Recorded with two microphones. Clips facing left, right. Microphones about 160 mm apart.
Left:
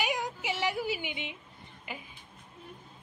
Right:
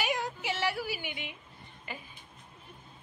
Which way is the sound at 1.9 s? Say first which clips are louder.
Left 1 dB; 15° left (ahead or behind).